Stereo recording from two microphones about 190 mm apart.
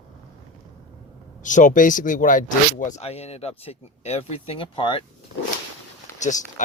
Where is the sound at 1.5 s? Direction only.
40° left (ahead or behind); by 5.0 s 25° left (ahead or behind).